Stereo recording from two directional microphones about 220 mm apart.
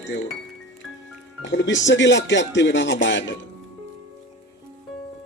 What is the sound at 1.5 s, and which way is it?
A man's voice, 55° left (ahead or behind).